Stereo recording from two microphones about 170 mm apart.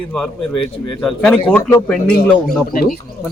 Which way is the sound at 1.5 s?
15° left (ahead or behind).